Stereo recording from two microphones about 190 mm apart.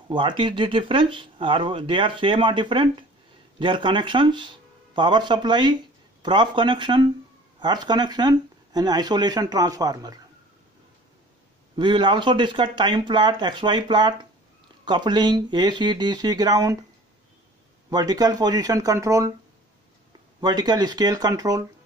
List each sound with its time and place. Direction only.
0.1 s speech: 25° right (ahead or behind)
11.7 s speech: 25° right (ahead or behind)
17.8 s speech: 20° right (ahead or behind)
20.3 s speech: 20° right (ahead or behind)